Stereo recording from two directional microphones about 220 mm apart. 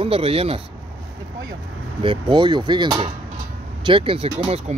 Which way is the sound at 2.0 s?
25° right (ahead or behind).